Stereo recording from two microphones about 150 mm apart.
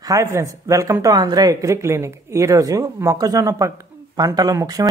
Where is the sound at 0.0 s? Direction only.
20° right (ahead or behind).